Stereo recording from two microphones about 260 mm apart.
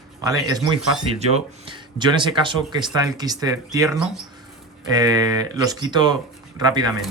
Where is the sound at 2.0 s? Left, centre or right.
Centre.